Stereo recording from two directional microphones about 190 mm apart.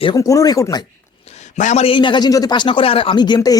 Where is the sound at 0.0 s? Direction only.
20° left (ahead or behind).